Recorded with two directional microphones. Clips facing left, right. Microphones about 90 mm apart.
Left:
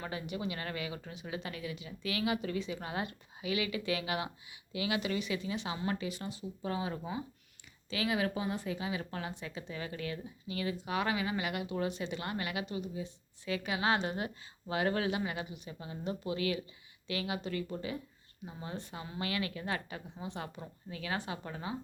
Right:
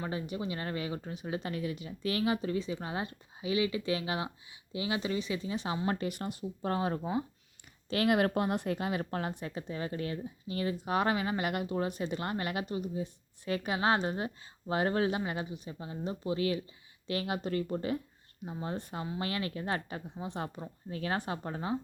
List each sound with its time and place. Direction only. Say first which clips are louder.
0.1 s speech: right 2 dB; 30° right (ahead or behind)
6.0 s speech: right 4 dB; 55° right (ahead or behind); by 16.6 s 30° right (ahead or behind)
17.1 s speech: right 3 dB; 45° right (ahead or behind)